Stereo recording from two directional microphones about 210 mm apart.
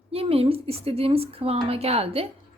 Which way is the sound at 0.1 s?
25° right (ahead or behind).